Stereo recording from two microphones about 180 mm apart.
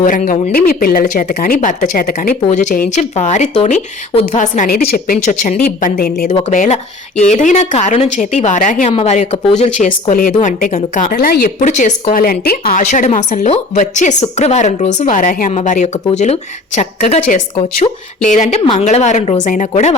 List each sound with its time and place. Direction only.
0.0 s speech: 45° left (ahead or behind)
0.5 s speech: 55° left (ahead or behind)
1.5 s speech: 45° left (ahead or behind)
2.4 s a woman's voice: 40° left (ahead or behind)
5.6 s speech: 55° left (ahead or behind)
6.5 s a woman's voice: 45° left (ahead or behind)
18.6 s a woman's voice: 30° left (ahead or behind)
18.9 s a woman's voice: 40° left (ahead or behind)